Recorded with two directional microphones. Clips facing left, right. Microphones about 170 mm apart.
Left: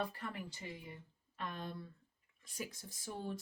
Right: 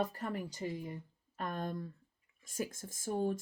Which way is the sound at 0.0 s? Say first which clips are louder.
Right 6 dB; 40° right (ahead or behind).